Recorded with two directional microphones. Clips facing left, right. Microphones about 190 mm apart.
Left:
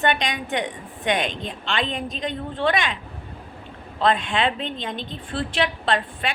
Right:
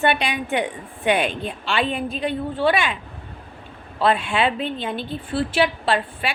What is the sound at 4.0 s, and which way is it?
A woman's voice, 10° right (ahead or behind).